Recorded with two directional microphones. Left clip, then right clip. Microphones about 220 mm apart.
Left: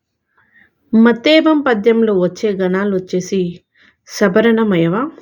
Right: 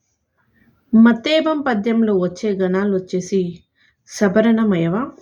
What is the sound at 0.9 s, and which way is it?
Speech, 15° left (ahead or behind).